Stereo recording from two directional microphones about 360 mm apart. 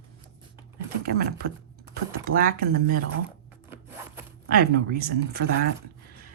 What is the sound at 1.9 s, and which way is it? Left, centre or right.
Typing, right.